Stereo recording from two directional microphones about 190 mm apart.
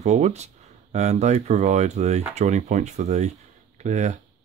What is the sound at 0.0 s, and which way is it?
Speech, 35° right (ahead or behind).